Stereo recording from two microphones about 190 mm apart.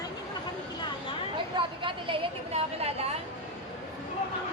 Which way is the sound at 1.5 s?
25° right (ahead or behind).